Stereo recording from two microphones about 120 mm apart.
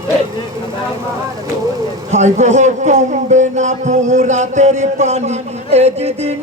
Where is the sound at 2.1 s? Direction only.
75° right (ahead or behind).